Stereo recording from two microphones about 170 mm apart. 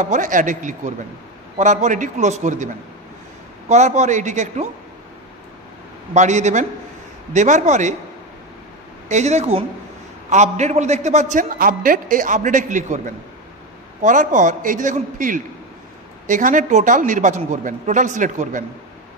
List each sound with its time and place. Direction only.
0.0 s a man's voice: 50° right (ahead or behind)
6.1 s a man's voice: 45° right (ahead or behind)
9.1 s a man's voice: 40° right (ahead or behind)